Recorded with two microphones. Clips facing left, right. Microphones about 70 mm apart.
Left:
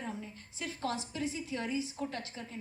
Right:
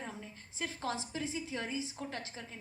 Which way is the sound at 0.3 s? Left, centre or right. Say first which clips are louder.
Right 1 dB; right.